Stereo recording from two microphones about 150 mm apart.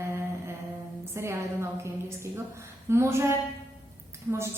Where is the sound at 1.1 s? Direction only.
20° right (ahead or behind).